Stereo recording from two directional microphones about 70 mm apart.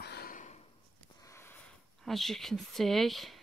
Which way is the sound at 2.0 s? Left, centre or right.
Centre.